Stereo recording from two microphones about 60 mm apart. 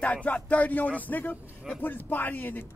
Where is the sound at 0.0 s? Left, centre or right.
Left.